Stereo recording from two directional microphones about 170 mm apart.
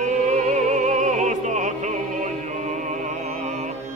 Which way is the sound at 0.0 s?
45° right (ahead or behind).